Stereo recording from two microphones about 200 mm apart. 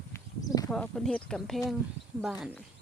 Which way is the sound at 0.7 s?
5° left (ahead or behind).